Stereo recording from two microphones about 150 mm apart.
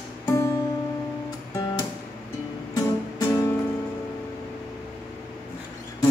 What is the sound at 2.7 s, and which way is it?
Music, 20° left (ahead or behind).